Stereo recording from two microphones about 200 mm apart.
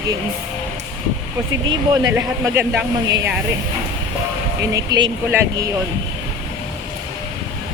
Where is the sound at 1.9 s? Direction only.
15° right (ahead or behind).